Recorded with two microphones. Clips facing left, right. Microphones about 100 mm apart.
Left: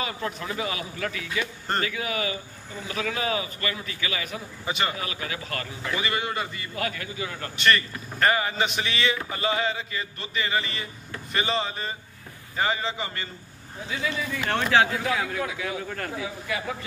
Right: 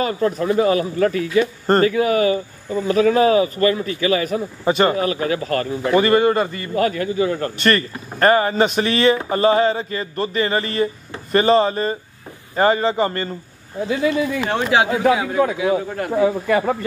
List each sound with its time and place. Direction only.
0.0 s a man's voice: 40° right (ahead or behind)
14.5 s speech: 15° right (ahead or behind)
16.1 s a man's voice: 55° right (ahead or behind)